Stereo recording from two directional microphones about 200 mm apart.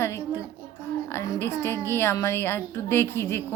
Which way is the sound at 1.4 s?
15° left (ahead or behind).